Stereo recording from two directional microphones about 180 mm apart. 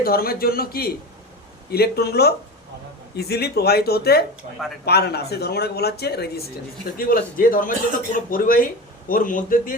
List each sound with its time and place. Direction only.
0.0 s speech: 55° left (ahead or behind)
4.4 s speech: 40° right (ahead or behind)
4.9 s speech: 65° left (ahead or behind)
6.9 s speech: 50° left (ahead or behind)